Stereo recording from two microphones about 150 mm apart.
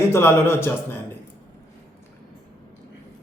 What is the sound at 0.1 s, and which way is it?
Speech, 15° left (ahead or behind).